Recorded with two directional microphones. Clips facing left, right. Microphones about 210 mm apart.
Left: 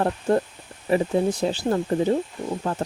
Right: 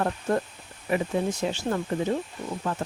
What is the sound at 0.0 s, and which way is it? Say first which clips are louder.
Speech: left 4 dB; 30° left (ahead or behind).